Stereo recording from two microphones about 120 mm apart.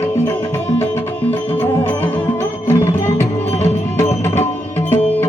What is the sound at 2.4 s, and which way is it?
Music, 20° left (ahead or behind).